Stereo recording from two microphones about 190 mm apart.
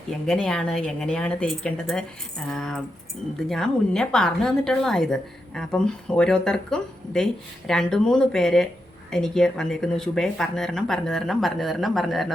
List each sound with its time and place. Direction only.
0.1 s a woman's voice: 5° left (ahead or behind)